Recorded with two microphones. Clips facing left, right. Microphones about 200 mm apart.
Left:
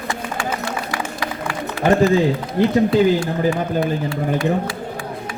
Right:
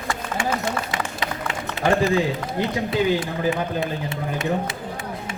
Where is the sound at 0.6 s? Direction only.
20° right (ahead or behind).